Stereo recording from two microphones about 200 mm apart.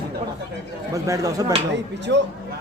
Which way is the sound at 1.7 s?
60° right (ahead or behind).